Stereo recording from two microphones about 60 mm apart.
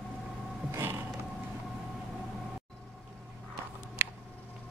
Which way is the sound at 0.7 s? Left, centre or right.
Right.